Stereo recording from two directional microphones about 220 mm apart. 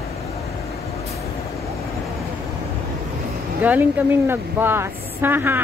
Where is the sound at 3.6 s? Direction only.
10° right (ahead or behind).